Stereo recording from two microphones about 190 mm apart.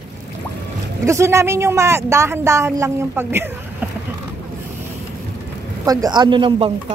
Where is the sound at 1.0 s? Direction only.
15° right (ahead or behind).